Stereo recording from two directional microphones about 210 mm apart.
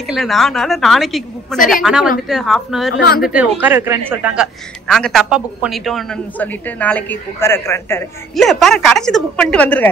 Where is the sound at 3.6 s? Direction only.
10° right (ahead or behind); by 8.1 s 10° left (ahead or behind).